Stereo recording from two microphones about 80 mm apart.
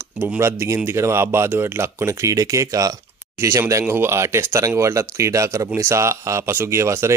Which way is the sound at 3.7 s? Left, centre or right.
Right.